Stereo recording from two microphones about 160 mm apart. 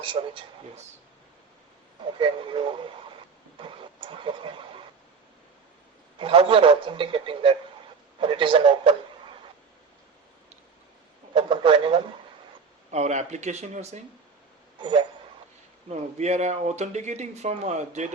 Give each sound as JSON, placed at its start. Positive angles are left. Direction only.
{"t": 0.0, "sound": "a man's voice", "side_deg": -30}
{"t": 2.1, "sound": "a man's voice", "side_deg": -30}
{"t": 3.6, "sound": "a sound", "side_deg": -30}
{"t": 6.1, "sound": "a man's voice", "side_deg": -35}
{"t": 11.3, "sound": "a man's voice", "side_deg": -35}
{"t": 12.9, "sound": "speech", "side_deg": -45}
{"t": 14.8, "sound": "speech", "side_deg": -30}
{"t": 15.9, "sound": "speech", "side_deg": -45}